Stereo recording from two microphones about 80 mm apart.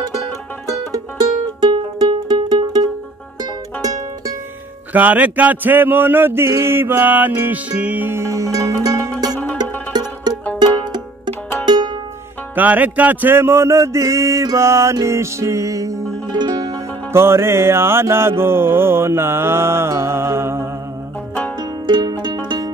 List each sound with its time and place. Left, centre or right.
0.7 s music: right
4.9 s music: centre
8.1 s music: right
9.6 s music: right
10.4 s music: centre
11.6 s music: right
12.5 s music: right
16.3 s music: right
17.1 s music: right
21.8 s music: right